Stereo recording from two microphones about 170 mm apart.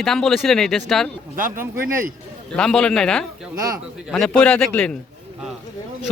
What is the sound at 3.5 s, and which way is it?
Speech, 20° right (ahead or behind).